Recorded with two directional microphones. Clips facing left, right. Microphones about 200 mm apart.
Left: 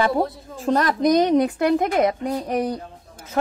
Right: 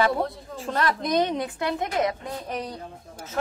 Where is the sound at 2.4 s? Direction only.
65° left (ahead or behind).